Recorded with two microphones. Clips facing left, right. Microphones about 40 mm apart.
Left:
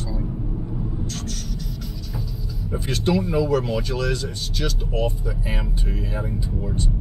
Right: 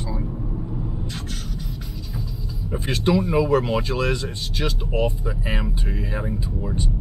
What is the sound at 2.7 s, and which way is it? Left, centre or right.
Speech, right.